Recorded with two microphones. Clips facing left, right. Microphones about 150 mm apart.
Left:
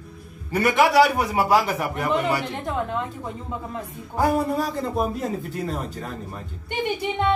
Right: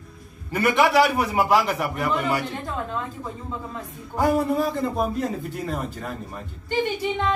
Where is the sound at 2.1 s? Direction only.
20° left (ahead or behind).